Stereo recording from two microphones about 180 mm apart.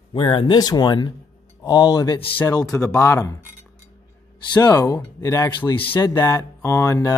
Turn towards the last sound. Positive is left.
turn(degrees=15)  # may be behind; listen again after turning